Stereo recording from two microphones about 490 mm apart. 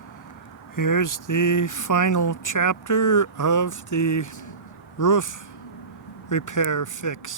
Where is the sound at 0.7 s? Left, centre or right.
Left.